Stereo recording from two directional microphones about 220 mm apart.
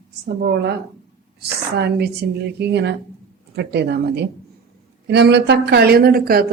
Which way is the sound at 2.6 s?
50° right (ahead or behind).